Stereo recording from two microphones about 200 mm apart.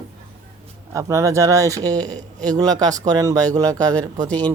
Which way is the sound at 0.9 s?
15° right (ahead or behind).